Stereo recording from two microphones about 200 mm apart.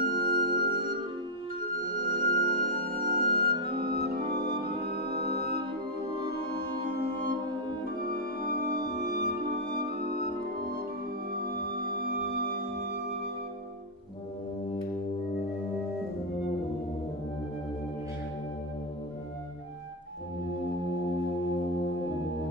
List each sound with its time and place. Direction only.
0.0 s music: 50° right (ahead or behind)
8.5 s music: 50° right (ahead or behind)
11.3 s music: 50° right (ahead or behind)